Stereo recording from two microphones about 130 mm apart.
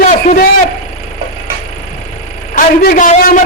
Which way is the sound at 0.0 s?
65° left (ahead or behind).